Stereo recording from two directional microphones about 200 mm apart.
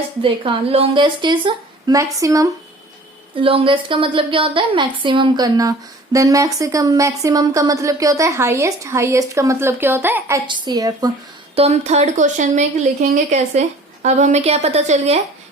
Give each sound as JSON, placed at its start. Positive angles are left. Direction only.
{"t": 0.2, "sound": "a woman's voice", "side_deg": -25}
{"t": 10.4, "sound": "a woman's voice", "side_deg": -20}
{"t": 11.5, "sound": "speech", "side_deg": -30}